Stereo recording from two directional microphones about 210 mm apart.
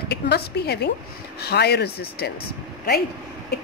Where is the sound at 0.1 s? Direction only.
50° left (ahead or behind).